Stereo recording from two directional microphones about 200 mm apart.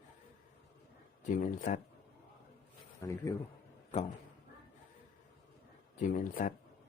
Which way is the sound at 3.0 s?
15° left (ahead or behind).